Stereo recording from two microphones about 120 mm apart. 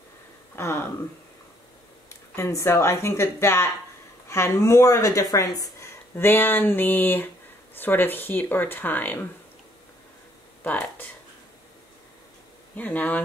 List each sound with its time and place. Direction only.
0.6 s speech: 20° left (ahead or behind)
2.0 s a woman's voice: 20° left (ahead or behind)
6.1 s speech: 15° left (ahead or behind)
10.6 s speech: 15° left (ahead or behind)
12.7 s speech: 15° left (ahead or behind)